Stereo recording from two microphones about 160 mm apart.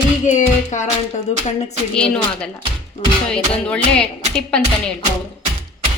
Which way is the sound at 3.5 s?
5° left (ahead or behind).